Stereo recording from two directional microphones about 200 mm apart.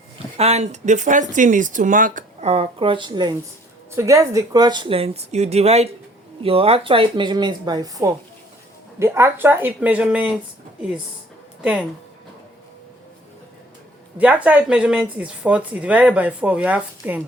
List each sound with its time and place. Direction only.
0.3 s speech: 30° right (ahead or behind); by 10.3 s 5° right (ahead or behind)
11.6 s speech: 5° right (ahead or behind)
14.2 s speech: 5° right (ahead or behind)